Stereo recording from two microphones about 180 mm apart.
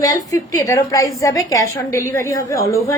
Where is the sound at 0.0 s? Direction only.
20° left (ahead or behind).